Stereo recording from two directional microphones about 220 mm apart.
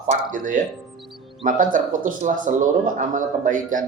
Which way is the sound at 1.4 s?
35° right (ahead or behind).